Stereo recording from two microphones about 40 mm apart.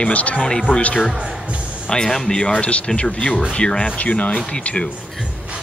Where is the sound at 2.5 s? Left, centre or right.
Left.